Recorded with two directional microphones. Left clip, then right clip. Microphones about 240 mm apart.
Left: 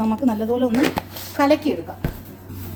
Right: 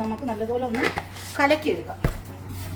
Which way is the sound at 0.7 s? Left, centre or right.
Left.